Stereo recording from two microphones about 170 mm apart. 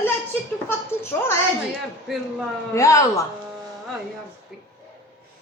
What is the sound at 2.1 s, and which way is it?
Speech, centre (ahead or behind).